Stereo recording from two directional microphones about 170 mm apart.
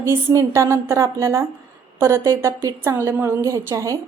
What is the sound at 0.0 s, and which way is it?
A woman's voice, 15° right (ahead or behind).